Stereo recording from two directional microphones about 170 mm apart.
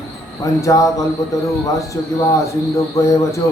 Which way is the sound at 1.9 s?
20° left (ahead or behind).